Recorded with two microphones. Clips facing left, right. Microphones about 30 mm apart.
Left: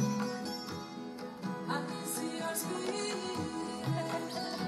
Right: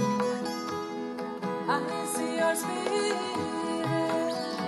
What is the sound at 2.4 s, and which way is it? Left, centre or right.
Music, right.